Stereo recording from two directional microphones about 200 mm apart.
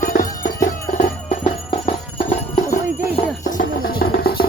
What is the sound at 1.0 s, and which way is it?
Music, 30° left (ahead or behind).